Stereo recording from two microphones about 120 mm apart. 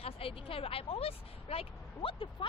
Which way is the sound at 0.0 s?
50° left (ahead or behind).